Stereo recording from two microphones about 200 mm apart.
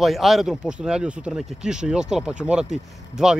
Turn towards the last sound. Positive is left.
turn(degrees=-5)  # may be behind; listen again after turning